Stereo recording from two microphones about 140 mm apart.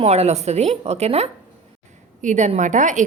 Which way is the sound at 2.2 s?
60° right (ahead or behind).